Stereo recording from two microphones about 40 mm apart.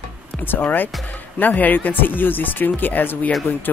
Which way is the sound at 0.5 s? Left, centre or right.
Left.